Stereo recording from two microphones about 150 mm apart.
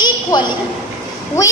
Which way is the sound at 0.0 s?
30° left (ahead or behind).